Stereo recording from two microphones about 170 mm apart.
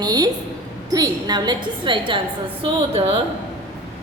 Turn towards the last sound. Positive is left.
turn(degrees=-30)  # may be behind; listen again after turning